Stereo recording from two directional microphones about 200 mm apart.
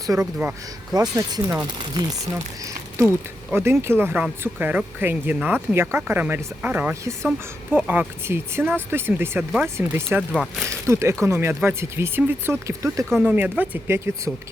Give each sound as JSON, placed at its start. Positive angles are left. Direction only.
{"t": 0.2, "sound": "speech", "side_deg": -5}
{"t": 0.9, "sound": "speech", "side_deg": -20}